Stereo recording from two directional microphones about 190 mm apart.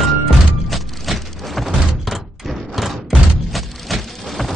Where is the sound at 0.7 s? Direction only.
Centre (ahead or behind).